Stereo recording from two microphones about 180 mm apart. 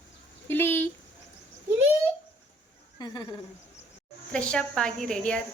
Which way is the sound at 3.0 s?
25° left (ahead or behind).